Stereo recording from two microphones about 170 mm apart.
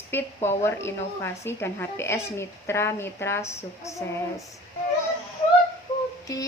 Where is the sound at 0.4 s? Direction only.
15° left (ahead or behind).